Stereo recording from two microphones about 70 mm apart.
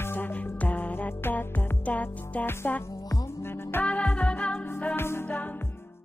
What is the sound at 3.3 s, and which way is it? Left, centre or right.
Music, left.